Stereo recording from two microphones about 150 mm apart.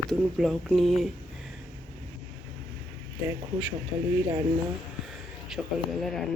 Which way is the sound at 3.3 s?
25° right (ahead or behind).